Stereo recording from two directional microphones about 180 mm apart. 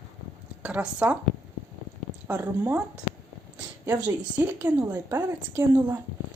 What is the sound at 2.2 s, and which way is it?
Speech, 10° right (ahead or behind).